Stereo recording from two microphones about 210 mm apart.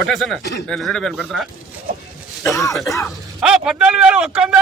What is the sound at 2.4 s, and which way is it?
Speech, 15° left (ahead or behind).